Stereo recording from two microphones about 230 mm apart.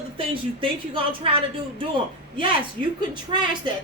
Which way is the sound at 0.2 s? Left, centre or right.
Right.